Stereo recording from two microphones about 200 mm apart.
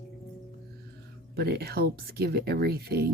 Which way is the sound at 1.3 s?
55° right (ahead or behind).